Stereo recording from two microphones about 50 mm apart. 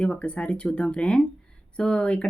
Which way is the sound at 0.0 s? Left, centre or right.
Left.